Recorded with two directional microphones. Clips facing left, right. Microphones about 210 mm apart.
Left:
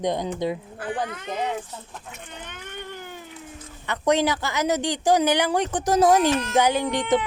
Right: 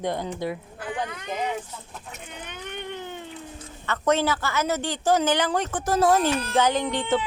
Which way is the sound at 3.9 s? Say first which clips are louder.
Left 1 dB; 15° left (ahead or behind).